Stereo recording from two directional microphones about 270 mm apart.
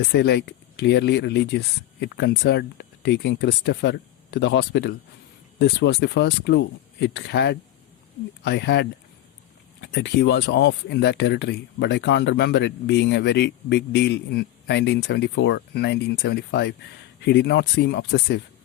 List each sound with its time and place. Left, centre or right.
0.0 s speech: left